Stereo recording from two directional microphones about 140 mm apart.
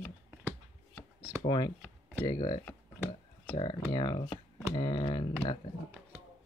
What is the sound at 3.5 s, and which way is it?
Speech, 35° left (ahead or behind).